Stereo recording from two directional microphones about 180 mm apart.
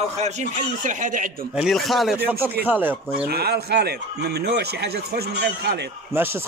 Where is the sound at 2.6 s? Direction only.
10° right (ahead or behind).